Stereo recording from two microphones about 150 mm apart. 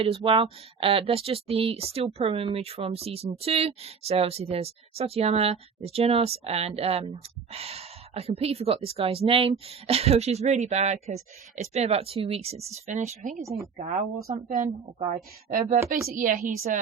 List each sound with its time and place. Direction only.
0.0 s speech: 40° right (ahead or behind); by 14.1 s 60° right (ahead or behind)
14.3 s speech: 45° right (ahead or behind)
16.0 s speech: 65° right (ahead or behind)